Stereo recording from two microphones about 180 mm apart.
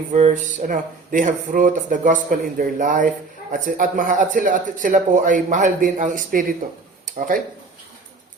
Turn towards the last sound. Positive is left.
turn(degrees=-50)  # may be behind; listen again after turning